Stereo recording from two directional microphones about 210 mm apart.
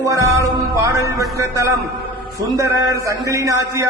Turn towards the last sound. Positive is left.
turn(degrees=-15)  # may be behind; listen again after turning